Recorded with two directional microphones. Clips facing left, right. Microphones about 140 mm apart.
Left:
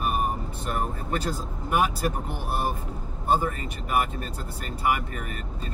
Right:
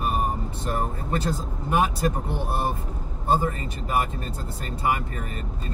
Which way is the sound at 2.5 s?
30° right (ahead or behind).